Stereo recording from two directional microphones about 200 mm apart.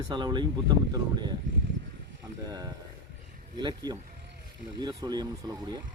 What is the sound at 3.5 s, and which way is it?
Speech, 20° right (ahead or behind).